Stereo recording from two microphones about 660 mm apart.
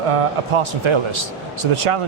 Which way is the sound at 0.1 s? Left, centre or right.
Right.